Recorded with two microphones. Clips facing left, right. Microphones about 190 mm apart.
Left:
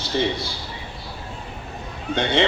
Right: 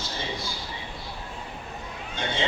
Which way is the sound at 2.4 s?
70° left (ahead or behind).